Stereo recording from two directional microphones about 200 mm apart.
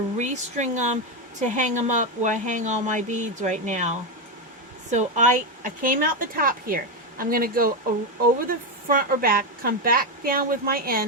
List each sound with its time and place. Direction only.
0.2 s a woman's voice: 35° right (ahead or behind)